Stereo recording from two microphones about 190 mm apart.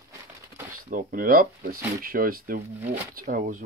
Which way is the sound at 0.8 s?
45° right (ahead or behind).